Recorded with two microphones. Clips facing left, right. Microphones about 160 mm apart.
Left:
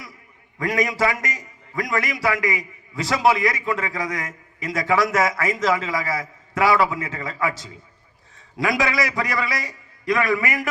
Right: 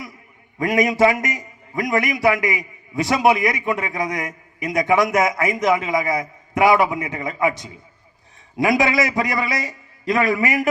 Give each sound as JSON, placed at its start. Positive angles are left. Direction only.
{"t": 0.6, "sound": "a man's voice", "side_deg": -20}